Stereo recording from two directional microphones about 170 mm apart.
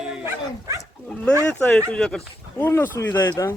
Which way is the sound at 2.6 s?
15° left (ahead or behind).